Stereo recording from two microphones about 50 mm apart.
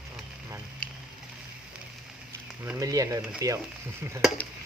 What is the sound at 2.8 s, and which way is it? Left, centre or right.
Speech, right.